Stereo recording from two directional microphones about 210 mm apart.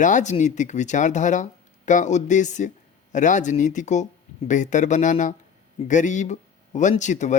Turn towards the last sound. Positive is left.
turn(degrees=35)  # may be behind; listen again after turning